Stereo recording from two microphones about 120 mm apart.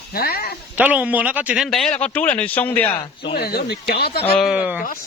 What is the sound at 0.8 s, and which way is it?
Speech, 15° right (ahead or behind).